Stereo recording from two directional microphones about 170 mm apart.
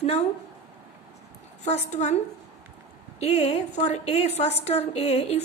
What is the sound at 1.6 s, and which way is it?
A woman's voice, 40° left (ahead or behind).